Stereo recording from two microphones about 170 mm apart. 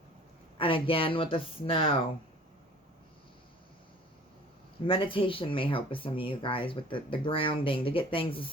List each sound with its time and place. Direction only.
0.6 s speech: 30° left (ahead or behind)
4.9 s speech: 30° left (ahead or behind)